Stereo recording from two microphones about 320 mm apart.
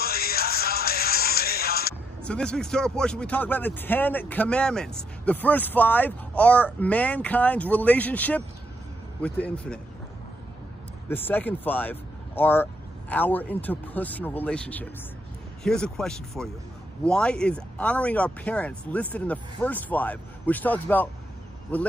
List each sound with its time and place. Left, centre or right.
0.0 s music: left
2.2 s speech: centre
11.1 s speech: centre